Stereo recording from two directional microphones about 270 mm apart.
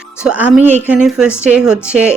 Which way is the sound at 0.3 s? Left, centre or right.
Centre.